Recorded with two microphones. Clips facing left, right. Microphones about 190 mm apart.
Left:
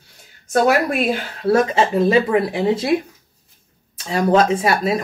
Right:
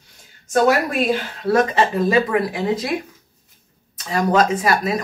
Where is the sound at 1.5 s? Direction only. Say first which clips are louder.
Left 1 dB; 30° left (ahead or behind).